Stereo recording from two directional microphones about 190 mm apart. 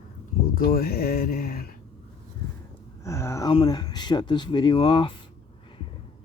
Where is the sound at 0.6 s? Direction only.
50° left (ahead or behind).